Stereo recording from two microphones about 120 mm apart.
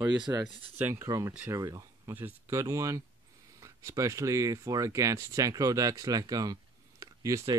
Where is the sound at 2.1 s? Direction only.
20° right (ahead or behind).